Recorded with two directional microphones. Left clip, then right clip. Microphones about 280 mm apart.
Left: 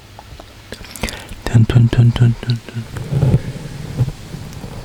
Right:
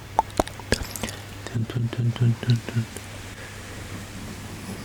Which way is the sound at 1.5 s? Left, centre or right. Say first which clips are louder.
Left 14 dB; left.